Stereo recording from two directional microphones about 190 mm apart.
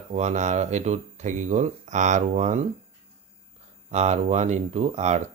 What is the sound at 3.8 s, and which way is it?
Speech, 35° right (ahead or behind).